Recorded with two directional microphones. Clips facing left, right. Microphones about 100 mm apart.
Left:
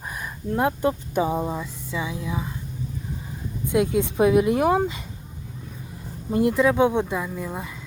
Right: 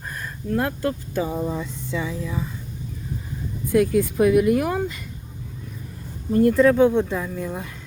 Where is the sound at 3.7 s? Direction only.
25° left (ahead or behind).